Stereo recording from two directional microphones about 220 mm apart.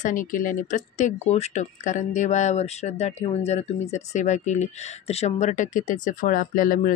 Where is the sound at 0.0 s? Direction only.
35° left (ahead or behind).